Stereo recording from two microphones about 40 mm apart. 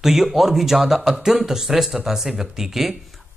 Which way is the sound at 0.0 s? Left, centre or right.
Centre.